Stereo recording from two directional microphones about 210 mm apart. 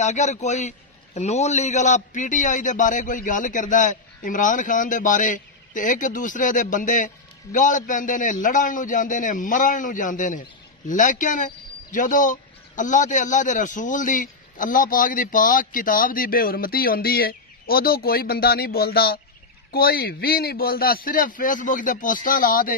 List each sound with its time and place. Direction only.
0.0 s a man's voice: 35° left (ahead or behind)